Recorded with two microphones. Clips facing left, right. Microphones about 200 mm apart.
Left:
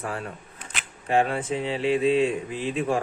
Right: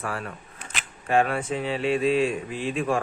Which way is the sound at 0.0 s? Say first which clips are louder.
Even; 20° left (ahead or behind).